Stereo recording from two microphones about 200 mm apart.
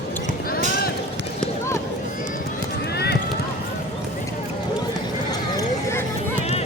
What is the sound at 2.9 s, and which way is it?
Clip-clop, 55° left (ahead or behind).